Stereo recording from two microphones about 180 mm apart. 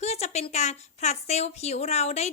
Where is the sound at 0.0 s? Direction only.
35° left (ahead or behind).